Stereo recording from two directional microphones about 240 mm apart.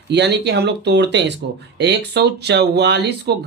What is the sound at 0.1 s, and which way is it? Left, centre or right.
Speech, right.